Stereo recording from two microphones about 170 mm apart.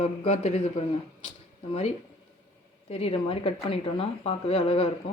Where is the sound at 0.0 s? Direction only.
40° left (ahead or behind).